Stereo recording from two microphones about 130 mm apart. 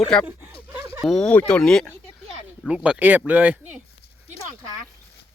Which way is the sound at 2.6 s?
5° right (ahead or behind).